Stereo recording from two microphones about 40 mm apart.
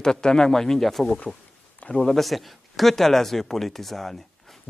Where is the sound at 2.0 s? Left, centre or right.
Centre.